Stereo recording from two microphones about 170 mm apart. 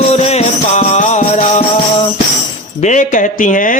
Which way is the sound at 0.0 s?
40° left (ahead or behind).